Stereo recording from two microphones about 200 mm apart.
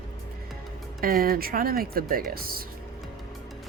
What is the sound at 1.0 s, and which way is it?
Speech, 45° right (ahead or behind).